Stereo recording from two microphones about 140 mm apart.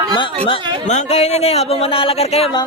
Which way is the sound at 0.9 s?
50° left (ahead or behind).